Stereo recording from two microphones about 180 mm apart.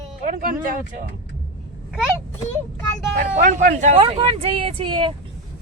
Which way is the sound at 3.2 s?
45° right (ahead or behind).